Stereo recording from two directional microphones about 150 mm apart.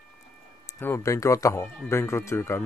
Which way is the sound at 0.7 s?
15° left (ahead or behind).